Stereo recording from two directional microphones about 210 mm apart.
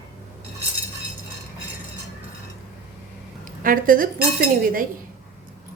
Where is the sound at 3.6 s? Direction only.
40° right (ahead or behind).